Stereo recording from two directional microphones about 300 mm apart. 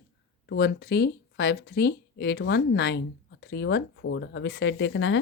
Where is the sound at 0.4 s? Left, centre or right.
Left.